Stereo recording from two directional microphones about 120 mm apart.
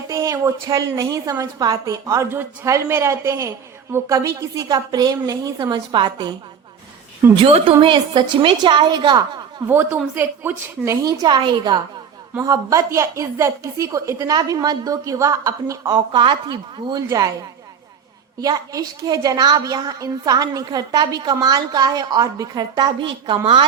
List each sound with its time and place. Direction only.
0.1 s a woman's voice: 25° right (ahead or behind)
7.3 s a woman's voice: 50° right (ahead or behind)
9.6 s a woman's voice: 15° right (ahead or behind)
11.0 s a woman's voice: 35° right (ahead or behind)
12.4 s a woman's voice: 30° right (ahead or behind)
17.1 s a woman's voice: 25° right (ahead or behind)
18.3 s a woman's voice: 30° right (ahead or behind)